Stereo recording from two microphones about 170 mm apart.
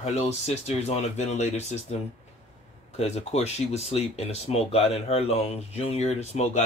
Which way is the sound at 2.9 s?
40° left (ahead or behind).